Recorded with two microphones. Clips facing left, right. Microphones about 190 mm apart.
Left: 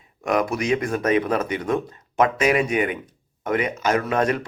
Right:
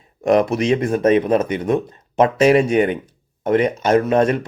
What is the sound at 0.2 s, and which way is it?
Speech, 30° right (ahead or behind).